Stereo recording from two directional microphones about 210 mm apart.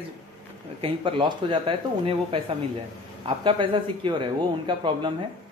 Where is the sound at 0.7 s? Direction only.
25° right (ahead or behind).